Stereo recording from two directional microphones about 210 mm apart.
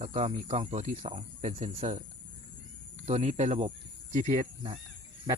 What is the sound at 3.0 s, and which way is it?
Speech, 35° right (ahead or behind).